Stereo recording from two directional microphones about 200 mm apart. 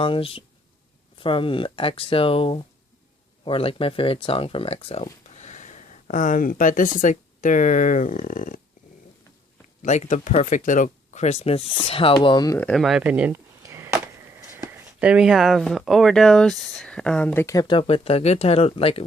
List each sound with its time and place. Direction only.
0.0 s speech: 25° left (ahead or behind)
9.8 s speech: 35° left (ahead or behind); by 12.5 s 20° left (ahead or behind)
12.5 s speech: 5° left (ahead or behind); by 19.0 s 30° left (ahead or behind)